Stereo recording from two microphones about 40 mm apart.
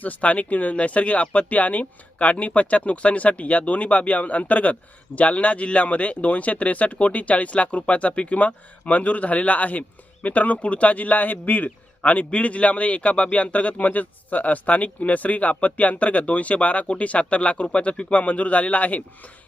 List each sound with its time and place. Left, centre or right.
0.0 s speech: left